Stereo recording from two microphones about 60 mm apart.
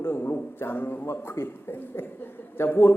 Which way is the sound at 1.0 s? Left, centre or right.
Left.